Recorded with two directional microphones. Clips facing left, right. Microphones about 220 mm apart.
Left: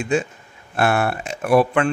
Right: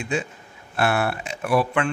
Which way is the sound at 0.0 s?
45° left (ahead or behind).